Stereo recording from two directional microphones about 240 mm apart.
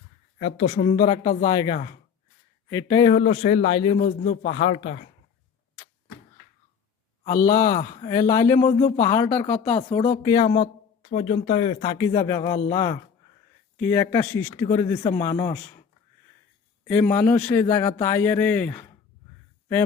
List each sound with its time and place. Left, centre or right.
0.3 s speech: left
1.5 s speech: centre
7.4 s speech: centre
7.8 s speech: left
8.1 s speech: centre
9.9 s speech: left
16.8 s speech: centre